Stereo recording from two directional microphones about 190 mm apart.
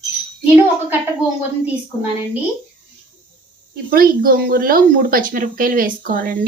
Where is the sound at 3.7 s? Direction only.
50° right (ahead or behind).